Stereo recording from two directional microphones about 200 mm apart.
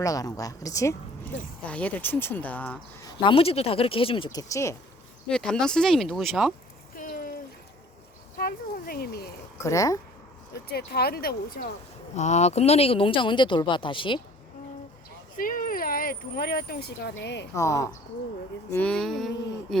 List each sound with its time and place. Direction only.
0.0 s speech: 15° left (ahead or behind)
3.2 s speech: 30° left (ahead or behind)
5.3 s speech: 5° left (ahead or behind)
6.9 s a sound: 45° left (ahead or behind)
8.4 s speech: 50° left (ahead or behind)
9.6 s speech: 15° left (ahead or behind)
10.7 s speech: 50° left (ahead or behind)
12.1 s speech: 35° left (ahead or behind)
15.4 s speech: 45° left (ahead or behind); by 17.5 s 60° left (ahead or behind)
17.5 s speech: 15° left (ahead or behind)